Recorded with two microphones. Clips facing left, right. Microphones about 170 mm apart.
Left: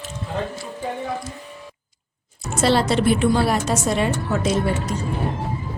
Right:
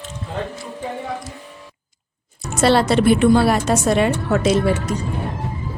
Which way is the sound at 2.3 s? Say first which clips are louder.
Right 3 dB; 65° right (ahead or behind).